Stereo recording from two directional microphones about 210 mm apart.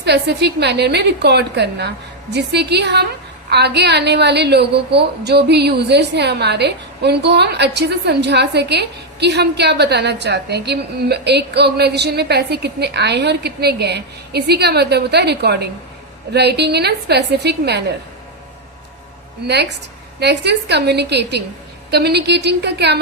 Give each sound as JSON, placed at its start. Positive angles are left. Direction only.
{"t": 0.0, "sound": "a woman's voice", "side_deg": -55}
{"t": 20.1, "sound": "a woman's voice", "side_deg": -55}